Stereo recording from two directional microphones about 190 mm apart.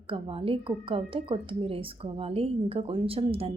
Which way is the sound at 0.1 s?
30° right (ahead or behind).